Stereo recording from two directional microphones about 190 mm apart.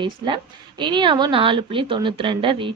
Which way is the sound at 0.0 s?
25° right (ahead or behind).